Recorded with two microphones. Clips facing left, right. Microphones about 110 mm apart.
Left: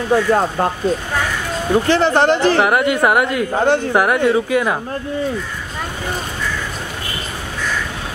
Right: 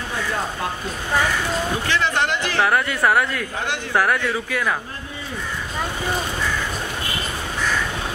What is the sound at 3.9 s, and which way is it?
Speech, 15° left (ahead or behind).